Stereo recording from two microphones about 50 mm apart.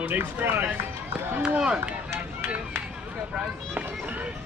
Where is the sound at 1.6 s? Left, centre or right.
Centre.